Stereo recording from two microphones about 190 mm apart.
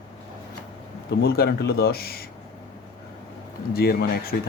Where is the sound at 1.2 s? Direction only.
55° left (ahead or behind).